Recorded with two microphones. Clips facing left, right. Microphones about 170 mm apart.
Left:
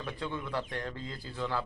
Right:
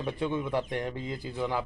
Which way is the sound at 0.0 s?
20° right (ahead or behind).